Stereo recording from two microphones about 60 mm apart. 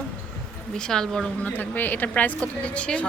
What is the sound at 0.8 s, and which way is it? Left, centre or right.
Speech, centre.